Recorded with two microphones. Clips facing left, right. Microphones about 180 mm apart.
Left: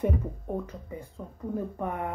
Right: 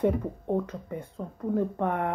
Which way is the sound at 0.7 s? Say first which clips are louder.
Right 4 dB; 60° right (ahead or behind).